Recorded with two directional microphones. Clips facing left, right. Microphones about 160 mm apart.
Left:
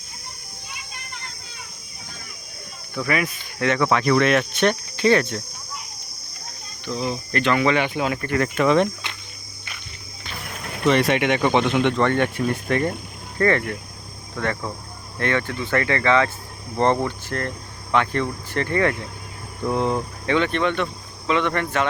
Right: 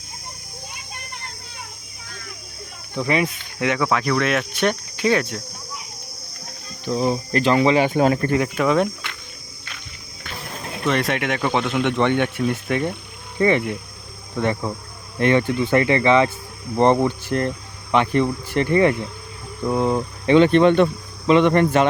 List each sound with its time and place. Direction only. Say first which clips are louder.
2.9 s speech: right 3 dB; 25° right (ahead or behind)
3.6 s speech: even; 10° right (ahead or behind)
3.8 s cricket: left 4 dB; centre (ahead or behind)
6.8 s speech: right 5 dB; 40° right (ahead or behind)
7.9 s speech: right 7 dB; 45° right (ahead or behind)
8.4 s cricket: left 1 dB; 5° right (ahead or behind)
10.8 s cricket: left 3 dB; centre (ahead or behind)
13.4 s speech: right 2 dB; 15° right (ahead or behind)
20.2 s speech: right 8 dB; 30° right (ahead or behind)
21.2 s speech: right 7 dB; 25° right (ahead or behind)